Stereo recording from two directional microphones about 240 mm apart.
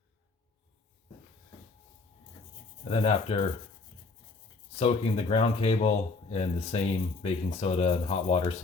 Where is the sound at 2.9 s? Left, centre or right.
Left.